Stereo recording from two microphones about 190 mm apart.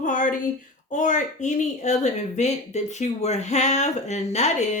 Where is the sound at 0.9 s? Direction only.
40° left (ahead or behind).